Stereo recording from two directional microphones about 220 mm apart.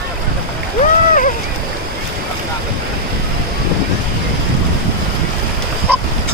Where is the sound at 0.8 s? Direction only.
35° left (ahead or behind).